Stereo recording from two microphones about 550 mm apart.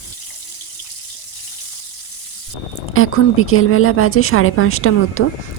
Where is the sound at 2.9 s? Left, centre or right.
Left.